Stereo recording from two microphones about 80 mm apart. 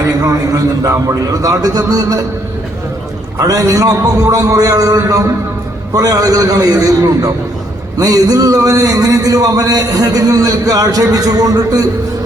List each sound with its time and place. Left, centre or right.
0.0 s a man's voice: right
3.3 s a man's voice: right